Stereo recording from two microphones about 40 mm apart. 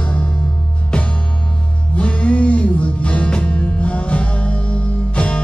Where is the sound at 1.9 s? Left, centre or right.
Left.